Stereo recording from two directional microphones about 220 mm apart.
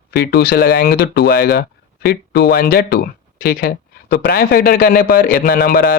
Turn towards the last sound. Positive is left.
turn(degrees=45)  # may be behind; listen again after turning